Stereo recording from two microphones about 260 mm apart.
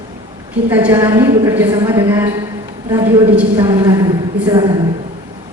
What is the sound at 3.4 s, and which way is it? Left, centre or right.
A woman's voice, centre.